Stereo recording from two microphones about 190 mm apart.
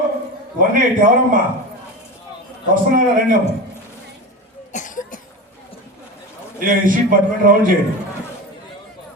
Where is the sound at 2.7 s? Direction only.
45° right (ahead or behind).